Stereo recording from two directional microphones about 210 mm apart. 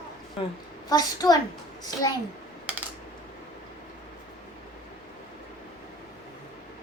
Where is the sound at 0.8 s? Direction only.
20° left (ahead or behind).